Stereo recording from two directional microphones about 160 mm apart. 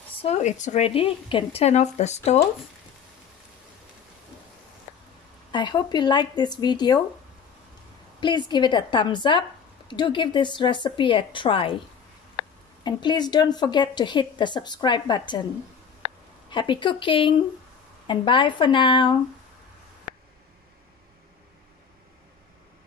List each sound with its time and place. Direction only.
0.2 s speech: 45° left (ahead or behind)
5.5 s a woman's voice: 30° left (ahead or behind)
8.2 s a woman's voice: 30° left (ahead or behind)
12.8 s a woman's voice: 30° left (ahead or behind)
16.4 s a woman's voice: 30° left (ahead or behind)